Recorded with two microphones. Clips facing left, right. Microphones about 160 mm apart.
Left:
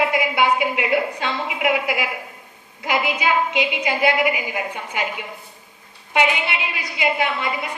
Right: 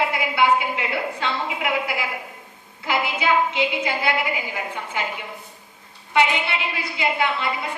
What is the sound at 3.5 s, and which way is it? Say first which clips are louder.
A woman's voice: left 1 dB; 15° left (ahead or behind).